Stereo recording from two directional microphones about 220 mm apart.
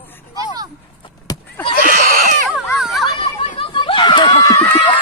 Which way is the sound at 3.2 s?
25° left (ahead or behind).